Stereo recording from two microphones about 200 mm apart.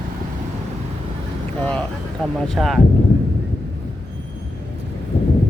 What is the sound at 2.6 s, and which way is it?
Speech, centre (ahead or behind).